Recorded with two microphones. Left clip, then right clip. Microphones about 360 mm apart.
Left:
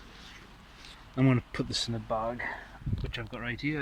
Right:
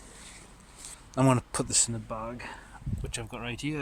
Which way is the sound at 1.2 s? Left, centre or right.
Centre.